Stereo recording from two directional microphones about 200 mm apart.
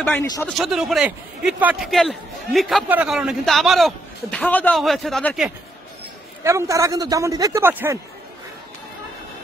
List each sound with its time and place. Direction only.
0.0 s a man's voice: 10° left (ahead or behind)
6.4 s speech: 15° right (ahead or behind)